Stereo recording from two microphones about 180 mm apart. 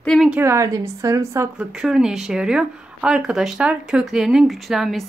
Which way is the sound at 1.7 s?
5° right (ahead or behind).